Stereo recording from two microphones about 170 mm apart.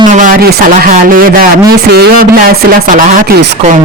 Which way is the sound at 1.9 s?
70° right (ahead or behind).